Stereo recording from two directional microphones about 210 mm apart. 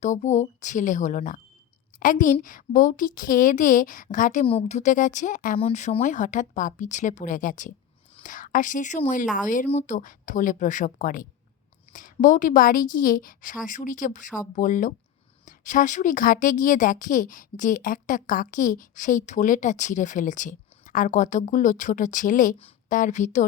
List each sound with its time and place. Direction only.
0.0 s a woman's voice: 35° left (ahead or behind)